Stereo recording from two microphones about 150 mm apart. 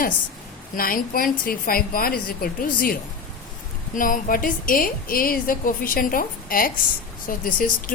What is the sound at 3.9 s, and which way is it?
A woman's voice, 65° left (ahead or behind).